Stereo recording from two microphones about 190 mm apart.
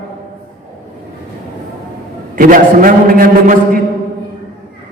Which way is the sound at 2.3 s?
45° right (ahead or behind).